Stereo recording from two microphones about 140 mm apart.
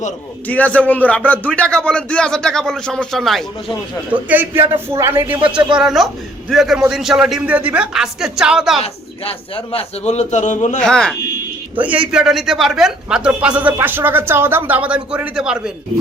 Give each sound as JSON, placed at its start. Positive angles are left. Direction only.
{"t": 0.4, "sound": "speech", "side_deg": 10}
{"t": 4.1, "sound": "speech", "side_deg": -10}
{"t": 5.7, "sound": "speech", "side_deg": 0}
{"t": 8.8, "sound": "a man's voice", "side_deg": 45}
{"t": 10.8, "sound": "speech", "side_deg": 5}
{"t": 11.8, "sound": "speech", "side_deg": -10}